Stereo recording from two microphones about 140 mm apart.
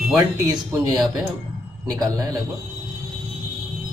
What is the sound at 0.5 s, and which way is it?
Speech, 30° right (ahead or behind).